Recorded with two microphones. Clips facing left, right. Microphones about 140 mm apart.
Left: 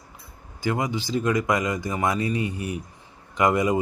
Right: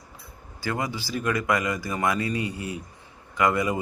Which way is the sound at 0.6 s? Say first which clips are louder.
Left 4 dB; 15° left (ahead or behind).